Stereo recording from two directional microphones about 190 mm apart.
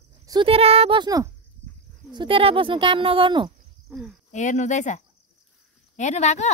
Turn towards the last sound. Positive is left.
turn(degrees=35)  # may be behind; listen again after turning